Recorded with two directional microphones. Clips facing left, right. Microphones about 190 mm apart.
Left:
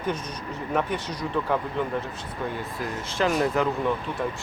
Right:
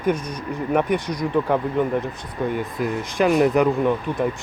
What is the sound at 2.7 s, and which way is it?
Speech, 15° right (ahead or behind).